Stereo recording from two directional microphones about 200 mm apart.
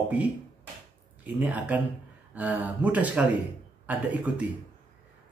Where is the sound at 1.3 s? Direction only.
10° right (ahead or behind).